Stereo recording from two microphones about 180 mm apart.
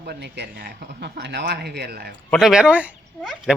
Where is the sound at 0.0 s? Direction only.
65° right (ahead or behind).